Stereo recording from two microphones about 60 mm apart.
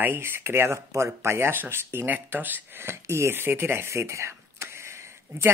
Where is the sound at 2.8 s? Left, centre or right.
Right.